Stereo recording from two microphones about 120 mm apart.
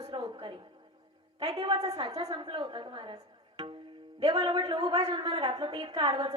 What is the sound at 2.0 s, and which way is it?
Speech, 30° right (ahead or behind).